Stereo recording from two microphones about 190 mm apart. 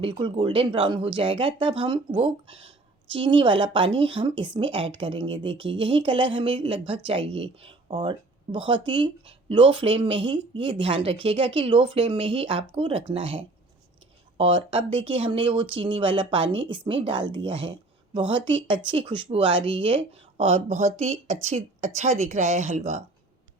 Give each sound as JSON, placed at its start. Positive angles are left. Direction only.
{"t": 0.0, "sound": "a woman's voice", "side_deg": -25}